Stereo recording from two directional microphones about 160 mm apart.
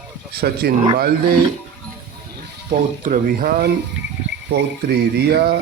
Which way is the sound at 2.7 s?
50° right (ahead or behind).